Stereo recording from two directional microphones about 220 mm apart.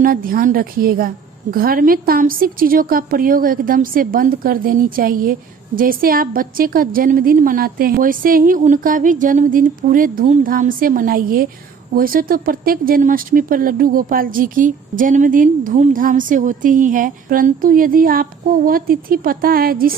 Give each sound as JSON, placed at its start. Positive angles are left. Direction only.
{"t": 0.0, "sound": "a woman's voice", "side_deg": -40}